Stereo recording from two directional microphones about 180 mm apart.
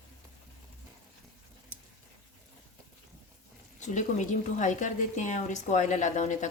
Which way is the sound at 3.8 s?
40° left (ahead or behind).